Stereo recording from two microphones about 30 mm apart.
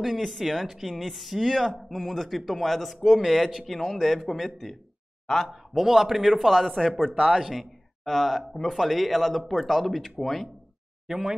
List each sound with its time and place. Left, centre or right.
0.0 s speech: centre
3.2 s speech: centre
5.2 s speech: centre
5.8 s speech: centre
11.1 s speech: centre